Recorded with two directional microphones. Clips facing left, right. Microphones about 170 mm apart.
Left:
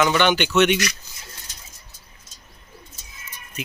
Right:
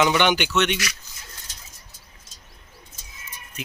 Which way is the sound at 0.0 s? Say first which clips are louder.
Left 1 dB; 15° right (ahead or behind).